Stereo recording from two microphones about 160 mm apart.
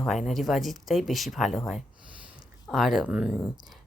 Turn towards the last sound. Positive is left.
turn(degrees=-5)  # may be behind; listen again after turning